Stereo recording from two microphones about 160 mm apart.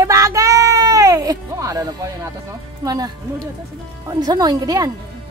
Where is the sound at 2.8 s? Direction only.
25° right (ahead or behind).